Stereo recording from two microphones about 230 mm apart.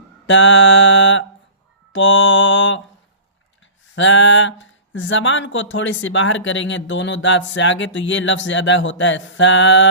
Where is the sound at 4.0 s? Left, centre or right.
Left.